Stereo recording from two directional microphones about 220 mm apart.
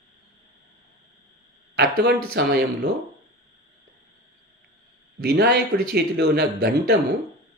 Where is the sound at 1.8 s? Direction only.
45° right (ahead or behind).